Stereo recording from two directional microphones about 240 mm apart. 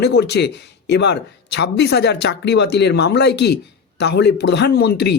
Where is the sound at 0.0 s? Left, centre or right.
Left.